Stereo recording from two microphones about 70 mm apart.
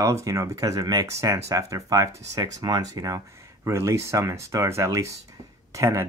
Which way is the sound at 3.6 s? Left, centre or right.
Right.